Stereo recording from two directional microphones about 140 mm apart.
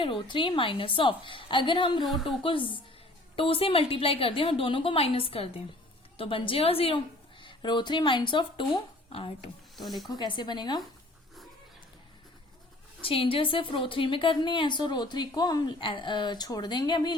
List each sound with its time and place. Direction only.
0.0 s a woman's voice: 35° left (ahead or behind)
2.0 s a woman's voice: centre (ahead or behind)
2.4 s a woman's voice: 40° left (ahead or behind)
9.7 s a woman's voice: centre (ahead or behind)
10.1 s a woman's voice: 35° left (ahead or behind)
13.0 s a woman's voice: 40° left (ahead or behind)